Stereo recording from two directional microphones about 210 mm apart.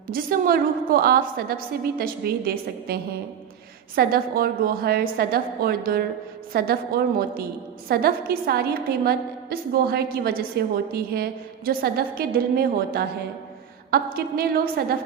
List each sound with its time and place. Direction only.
0.1 s a woman's voice: 45° right (ahead or behind)